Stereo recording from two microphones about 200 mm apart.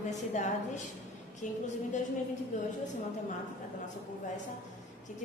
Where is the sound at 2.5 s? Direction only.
40° left (ahead or behind).